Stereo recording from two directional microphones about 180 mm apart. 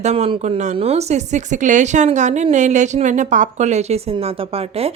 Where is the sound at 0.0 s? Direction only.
35° right (ahead or behind).